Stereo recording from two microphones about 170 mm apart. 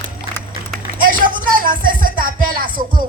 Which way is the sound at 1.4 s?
55° right (ahead or behind).